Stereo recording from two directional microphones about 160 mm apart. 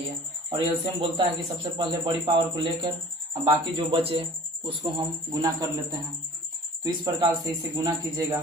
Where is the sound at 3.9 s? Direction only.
35° right (ahead or behind).